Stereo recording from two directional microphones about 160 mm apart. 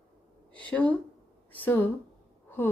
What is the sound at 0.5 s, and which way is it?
Speech, 10° left (ahead or behind).